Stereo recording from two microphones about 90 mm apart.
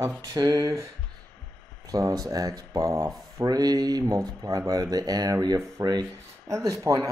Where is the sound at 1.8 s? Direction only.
45° right (ahead or behind).